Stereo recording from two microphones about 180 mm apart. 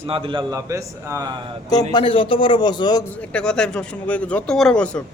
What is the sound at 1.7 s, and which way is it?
A man's voice, 25° left (ahead or behind).